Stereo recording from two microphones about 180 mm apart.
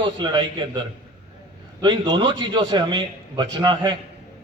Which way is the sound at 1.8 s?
25° right (ahead or behind).